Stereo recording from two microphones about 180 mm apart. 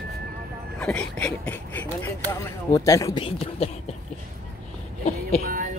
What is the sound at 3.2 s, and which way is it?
Speech, 35° left (ahead or behind).